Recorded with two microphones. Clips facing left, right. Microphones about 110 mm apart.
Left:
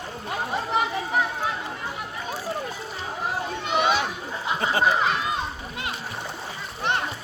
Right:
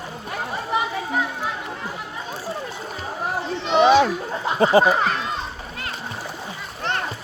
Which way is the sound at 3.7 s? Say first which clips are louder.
Right 9 dB; 35° right (ahead or behind).